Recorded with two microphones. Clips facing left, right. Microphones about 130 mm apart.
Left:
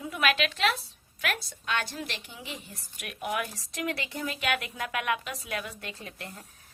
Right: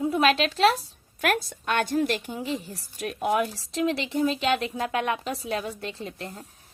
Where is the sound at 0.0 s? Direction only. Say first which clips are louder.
Right 6 dB; 30° right (ahead or behind).